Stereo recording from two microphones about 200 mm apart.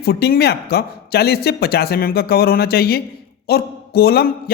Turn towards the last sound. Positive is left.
turn(degrees=50)  # may be behind; listen again after turning